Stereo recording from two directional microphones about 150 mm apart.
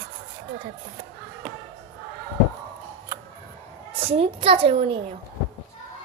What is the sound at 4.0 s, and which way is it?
A child's voice, 40° right (ahead or behind).